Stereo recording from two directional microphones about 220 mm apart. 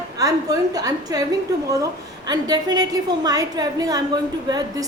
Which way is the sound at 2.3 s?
20° right (ahead or behind).